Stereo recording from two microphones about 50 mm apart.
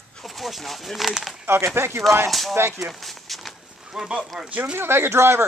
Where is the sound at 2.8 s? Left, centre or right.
Centre.